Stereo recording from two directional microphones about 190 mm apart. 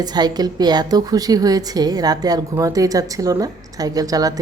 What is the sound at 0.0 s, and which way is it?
A woman's voice, 20° right (ahead or behind).